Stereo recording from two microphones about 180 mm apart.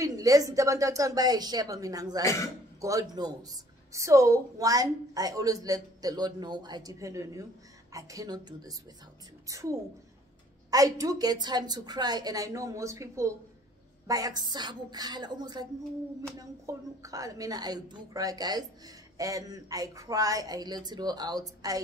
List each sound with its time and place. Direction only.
0.0 s a woman's voice: 20° right (ahead or behind)